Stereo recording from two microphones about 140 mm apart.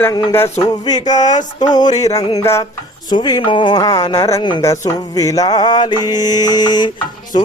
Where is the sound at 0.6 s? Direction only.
30° left (ahead or behind).